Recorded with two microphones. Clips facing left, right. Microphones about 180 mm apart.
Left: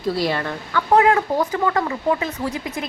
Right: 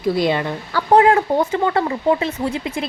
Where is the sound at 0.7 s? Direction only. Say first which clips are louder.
Right 3 dB; 30° right (ahead or behind).